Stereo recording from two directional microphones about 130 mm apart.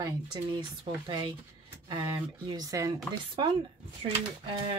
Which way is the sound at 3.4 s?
40° right (ahead or behind).